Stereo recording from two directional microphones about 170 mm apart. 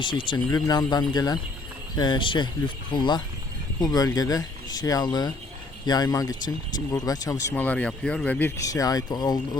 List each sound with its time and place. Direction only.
0.0 s speech: 30° left (ahead or behind)